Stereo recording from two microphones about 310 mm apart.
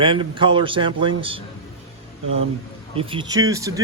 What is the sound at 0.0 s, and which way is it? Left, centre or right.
A man's voice, centre.